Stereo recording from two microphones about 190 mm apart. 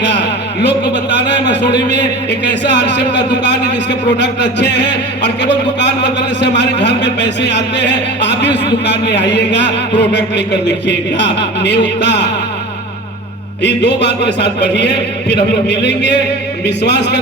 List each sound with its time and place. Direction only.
0.0 s a sound: 65° left (ahead or behind)
2.5 s speech: 65° left (ahead or behind)
13.6 s a man's voice: 65° left (ahead or behind)